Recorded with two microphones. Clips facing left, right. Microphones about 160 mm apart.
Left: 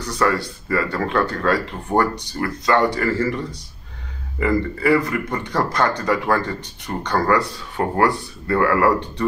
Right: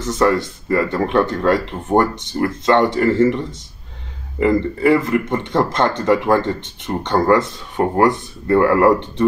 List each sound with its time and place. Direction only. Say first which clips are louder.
0.0 s speech: right 4 dB; 20° right (ahead or behind)